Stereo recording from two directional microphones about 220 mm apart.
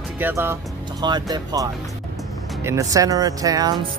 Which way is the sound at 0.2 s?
10° right (ahead or behind).